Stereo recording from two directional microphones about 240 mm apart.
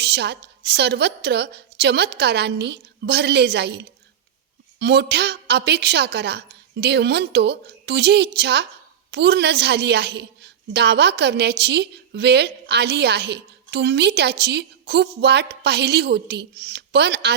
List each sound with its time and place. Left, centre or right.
0.0 s a woman's voice: right